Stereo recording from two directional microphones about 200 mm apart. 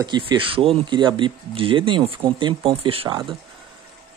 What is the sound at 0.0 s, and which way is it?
Speech, 20° right (ahead or behind).